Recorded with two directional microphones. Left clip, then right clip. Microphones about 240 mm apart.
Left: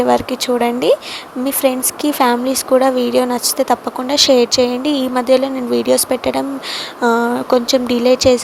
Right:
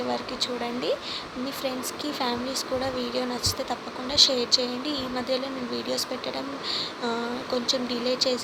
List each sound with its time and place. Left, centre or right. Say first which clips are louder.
0.1 s speech: left 14 dB; left